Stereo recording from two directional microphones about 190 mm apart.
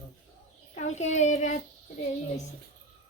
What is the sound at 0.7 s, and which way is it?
Speech, 40° left (ahead or behind).